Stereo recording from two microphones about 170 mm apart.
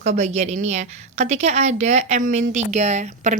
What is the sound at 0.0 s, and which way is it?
A woman's voice, 40° right (ahead or behind).